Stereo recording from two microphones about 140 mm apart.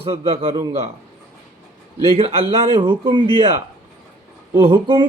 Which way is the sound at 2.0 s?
45° right (ahead or behind).